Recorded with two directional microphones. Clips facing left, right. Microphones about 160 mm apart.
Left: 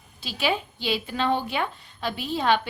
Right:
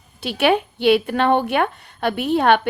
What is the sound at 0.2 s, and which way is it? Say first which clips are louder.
A woman's voice: right 9 dB; 65° right (ahead or behind).